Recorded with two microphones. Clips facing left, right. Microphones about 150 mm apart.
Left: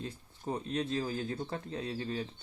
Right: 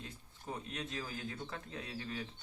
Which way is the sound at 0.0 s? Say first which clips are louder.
Left 9 dB; 35° left (ahead or behind).